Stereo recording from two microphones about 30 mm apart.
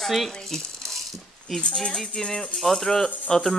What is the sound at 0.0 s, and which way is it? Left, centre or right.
Speech, centre.